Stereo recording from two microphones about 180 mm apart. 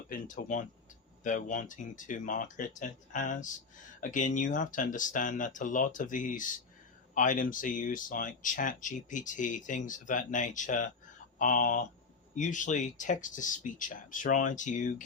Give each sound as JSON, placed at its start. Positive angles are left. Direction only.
{"t": 0.1, "sound": "speech", "side_deg": 45}